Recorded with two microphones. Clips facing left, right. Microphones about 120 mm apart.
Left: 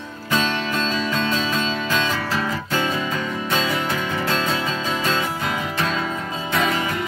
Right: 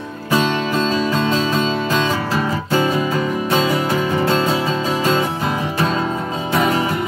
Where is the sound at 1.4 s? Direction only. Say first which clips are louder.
Right 5 dB; 10° right (ahead or behind).